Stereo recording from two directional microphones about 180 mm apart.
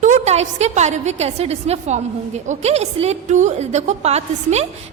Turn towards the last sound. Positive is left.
turn(degrees=-35)  # may be behind; listen again after turning